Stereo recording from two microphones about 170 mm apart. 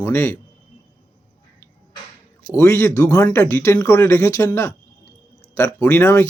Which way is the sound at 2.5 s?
15° left (ahead or behind).